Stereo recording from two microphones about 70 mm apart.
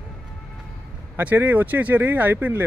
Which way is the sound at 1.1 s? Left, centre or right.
Right.